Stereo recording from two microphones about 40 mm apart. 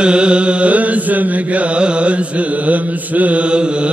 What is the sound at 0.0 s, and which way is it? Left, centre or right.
Carnatic music, right.